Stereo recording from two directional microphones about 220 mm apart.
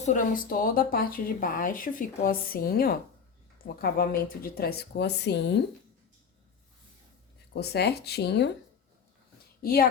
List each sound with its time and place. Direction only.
0.0 s speech: 35° left (ahead or behind); by 5.5 s 50° left (ahead or behind)
7.5 s speech: 50° left (ahead or behind)
9.6 s speech: 40° left (ahead or behind)